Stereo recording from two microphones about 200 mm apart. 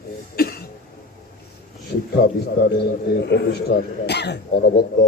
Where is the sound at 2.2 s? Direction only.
55° left (ahead or behind).